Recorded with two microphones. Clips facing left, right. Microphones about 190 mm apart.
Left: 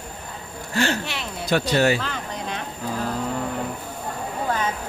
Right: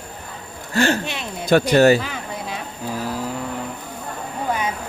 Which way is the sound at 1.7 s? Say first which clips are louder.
Right 6 dB; 45° right (ahead or behind).